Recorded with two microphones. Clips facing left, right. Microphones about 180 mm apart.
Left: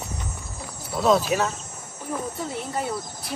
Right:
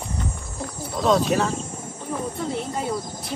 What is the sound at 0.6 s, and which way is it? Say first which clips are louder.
Wild animals: even; 5° left (ahead or behind).